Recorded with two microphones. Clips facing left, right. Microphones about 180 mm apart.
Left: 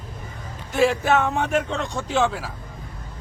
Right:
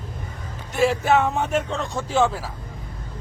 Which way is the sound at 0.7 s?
Centre (ahead or behind).